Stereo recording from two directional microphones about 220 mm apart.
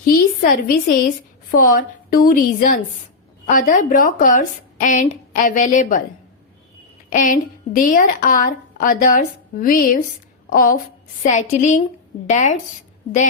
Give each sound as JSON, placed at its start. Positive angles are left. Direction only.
{"t": 0.0, "sound": "a woman's voice", "side_deg": 40}
{"t": 7.1, "sound": "speech", "side_deg": 35}